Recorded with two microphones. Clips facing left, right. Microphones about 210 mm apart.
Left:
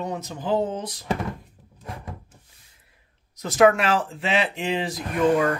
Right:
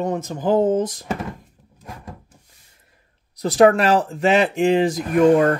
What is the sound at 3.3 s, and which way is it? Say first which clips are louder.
Speech: right 4 dB; 35° right (ahead or behind).